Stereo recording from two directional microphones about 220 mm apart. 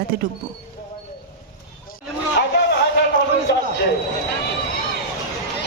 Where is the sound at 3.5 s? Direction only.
50° left (ahead or behind).